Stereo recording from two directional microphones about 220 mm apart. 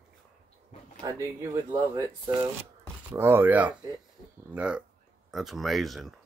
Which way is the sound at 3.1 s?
10° right (ahead or behind).